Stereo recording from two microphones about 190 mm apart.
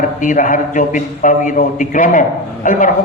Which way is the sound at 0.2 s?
45° left (ahead or behind).